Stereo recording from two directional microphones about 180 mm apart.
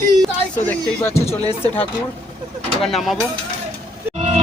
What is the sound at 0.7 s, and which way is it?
Speech, 15° left (ahead or behind).